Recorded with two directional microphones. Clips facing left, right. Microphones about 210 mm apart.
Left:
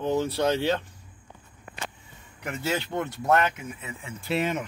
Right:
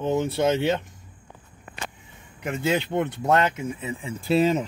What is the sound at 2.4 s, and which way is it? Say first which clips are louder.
Speech: right 5 dB; 20° right (ahead or behind).